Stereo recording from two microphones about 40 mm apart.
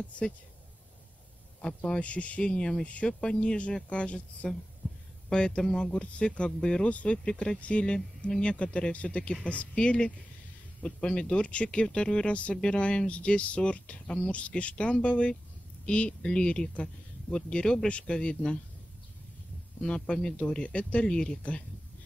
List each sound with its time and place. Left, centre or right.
1.6 s a man's voice: centre
2.0 s speech: left
2.5 s speech: left
5.6 s a man's voice: centre
5.9 s speech: left
6.9 s speech: left
7.2 s speech: left
18.1 s speech: centre
19.8 s speech: left